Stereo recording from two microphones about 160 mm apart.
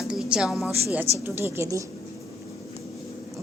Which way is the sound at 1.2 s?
15° right (ahead or behind).